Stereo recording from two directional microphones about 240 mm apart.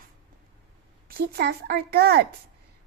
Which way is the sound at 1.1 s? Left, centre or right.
Right.